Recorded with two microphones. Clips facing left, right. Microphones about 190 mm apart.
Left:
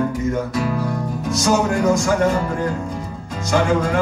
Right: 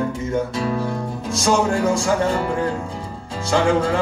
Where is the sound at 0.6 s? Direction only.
25° right (ahead or behind).